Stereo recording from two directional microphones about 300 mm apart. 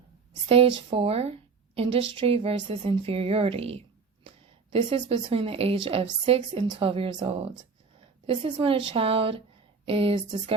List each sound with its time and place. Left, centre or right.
0.4 s a woman's voice: centre